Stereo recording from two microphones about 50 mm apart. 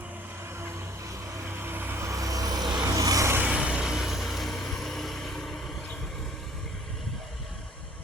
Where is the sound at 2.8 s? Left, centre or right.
Right.